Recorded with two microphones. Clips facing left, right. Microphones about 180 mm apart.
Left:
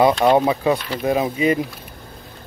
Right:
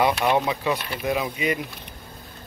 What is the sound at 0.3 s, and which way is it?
Speech, 35° left (ahead or behind).